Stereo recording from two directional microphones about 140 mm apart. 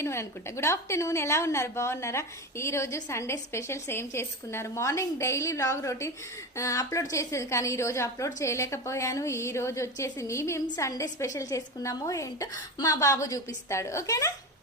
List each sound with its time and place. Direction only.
0.0 s a woman's voice: 20° left (ahead or behind)